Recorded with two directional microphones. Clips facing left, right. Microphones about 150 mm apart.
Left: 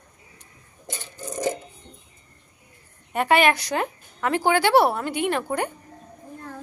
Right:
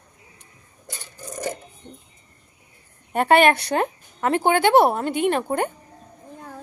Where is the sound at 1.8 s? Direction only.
20° right (ahead or behind).